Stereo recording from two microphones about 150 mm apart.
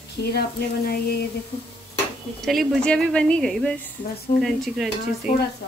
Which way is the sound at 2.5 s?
Centre (ahead or behind).